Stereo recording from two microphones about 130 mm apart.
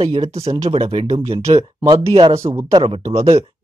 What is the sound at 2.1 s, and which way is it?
Speech, 40° right (ahead or behind).